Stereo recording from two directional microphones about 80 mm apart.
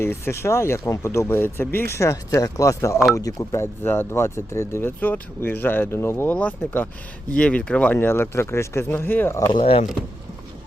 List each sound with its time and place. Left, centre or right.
0.0 s speech: left
3.6 s speech: left
6.3 s speech: centre
7.9 s speech: left